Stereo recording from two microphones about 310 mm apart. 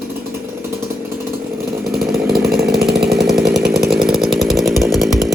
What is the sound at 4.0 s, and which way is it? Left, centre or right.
Chainsaw, centre.